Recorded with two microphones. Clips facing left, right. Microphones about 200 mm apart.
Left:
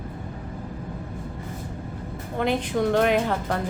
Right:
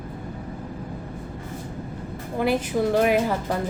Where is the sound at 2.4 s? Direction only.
5° right (ahead or behind).